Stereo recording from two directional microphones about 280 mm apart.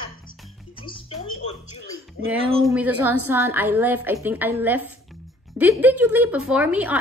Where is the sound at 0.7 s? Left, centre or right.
Centre.